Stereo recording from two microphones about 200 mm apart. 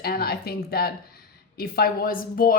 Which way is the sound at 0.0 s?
50° left (ahead or behind).